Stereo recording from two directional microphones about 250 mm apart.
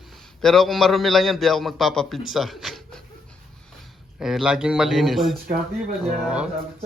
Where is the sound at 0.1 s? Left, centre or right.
Centre.